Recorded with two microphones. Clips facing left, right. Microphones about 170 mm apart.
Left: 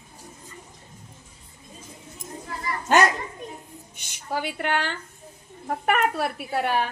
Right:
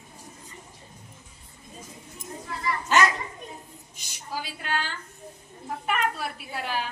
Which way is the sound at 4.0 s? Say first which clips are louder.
Left 6 dB; 60° left (ahead or behind).